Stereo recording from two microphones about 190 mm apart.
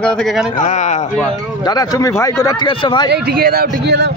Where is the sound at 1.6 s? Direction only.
20° left (ahead or behind).